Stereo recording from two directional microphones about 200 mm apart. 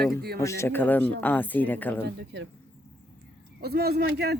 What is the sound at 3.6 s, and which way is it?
Speech, 55° right (ahead or behind).